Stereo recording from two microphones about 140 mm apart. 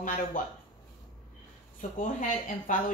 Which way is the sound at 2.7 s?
70° left (ahead or behind).